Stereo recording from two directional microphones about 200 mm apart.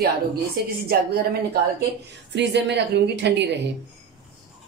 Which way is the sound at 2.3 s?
60° right (ahead or behind).